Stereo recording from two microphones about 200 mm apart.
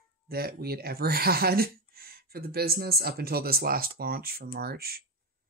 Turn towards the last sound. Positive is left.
turn(degrees=-50)  # may be behind; listen again after turning